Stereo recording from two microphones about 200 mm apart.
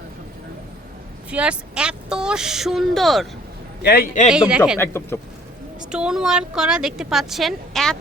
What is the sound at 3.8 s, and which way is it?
Speech, 50° left (ahead or behind).